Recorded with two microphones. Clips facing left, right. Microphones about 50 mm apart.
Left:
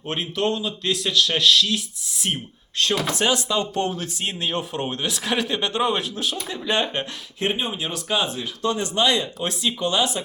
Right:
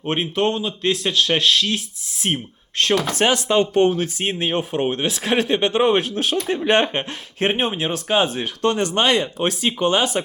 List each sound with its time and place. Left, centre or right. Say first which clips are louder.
0.0 s speech: right 4 dB; right
9.0 s speech: right 3 dB; right